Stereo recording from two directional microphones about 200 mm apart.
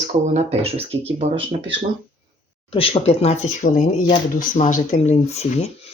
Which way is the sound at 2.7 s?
25° left (ahead or behind).